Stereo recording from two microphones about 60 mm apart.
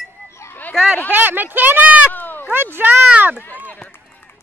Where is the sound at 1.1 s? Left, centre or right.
Right.